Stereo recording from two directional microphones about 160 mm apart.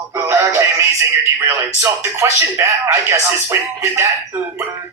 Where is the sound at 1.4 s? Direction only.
15° right (ahead or behind).